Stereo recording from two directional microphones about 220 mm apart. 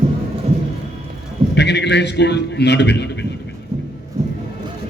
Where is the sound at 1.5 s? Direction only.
50° left (ahead or behind).